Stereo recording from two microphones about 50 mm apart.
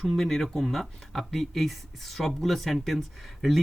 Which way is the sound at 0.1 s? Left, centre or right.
Centre.